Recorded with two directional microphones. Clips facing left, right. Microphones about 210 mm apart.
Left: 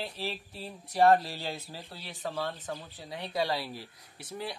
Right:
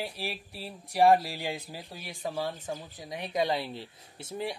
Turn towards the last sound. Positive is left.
turn(degrees=-25)  # may be behind; listen again after turning